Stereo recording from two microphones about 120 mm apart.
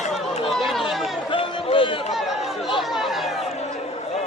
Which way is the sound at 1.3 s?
45° left (ahead or behind).